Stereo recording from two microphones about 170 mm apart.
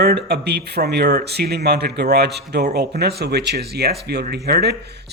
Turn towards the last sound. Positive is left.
turn(degrees=-70)  # may be behind; listen again after turning